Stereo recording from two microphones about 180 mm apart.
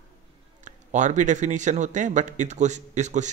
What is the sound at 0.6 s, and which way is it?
A man's voice, 45° right (ahead or behind).